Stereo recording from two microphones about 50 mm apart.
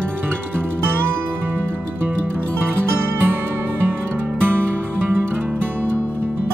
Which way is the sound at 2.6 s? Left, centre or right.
Right.